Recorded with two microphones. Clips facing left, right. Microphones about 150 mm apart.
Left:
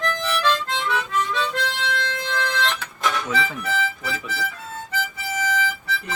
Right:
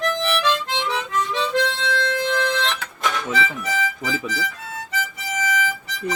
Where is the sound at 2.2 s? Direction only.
20° right (ahead or behind).